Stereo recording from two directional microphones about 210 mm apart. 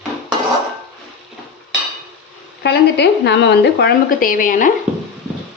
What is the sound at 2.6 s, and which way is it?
Speech, 55° left (ahead or behind).